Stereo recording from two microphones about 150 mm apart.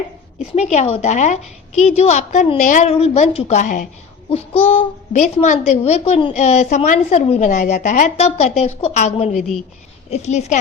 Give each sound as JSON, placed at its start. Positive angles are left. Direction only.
{"t": 0.3, "sound": "a child's voice", "side_deg": 50}
{"t": 2.9, "sound": "a child's voice", "side_deg": 40}
{"t": 4.3, "sound": "a child's voice", "side_deg": 40}